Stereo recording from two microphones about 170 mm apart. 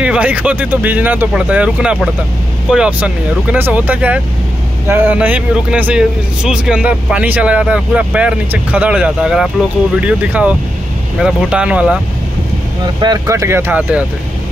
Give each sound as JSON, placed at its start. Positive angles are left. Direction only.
{"t": 0.0, "sound": "speech", "side_deg": -5}
{"t": 12.8, "sound": "speech", "side_deg": -25}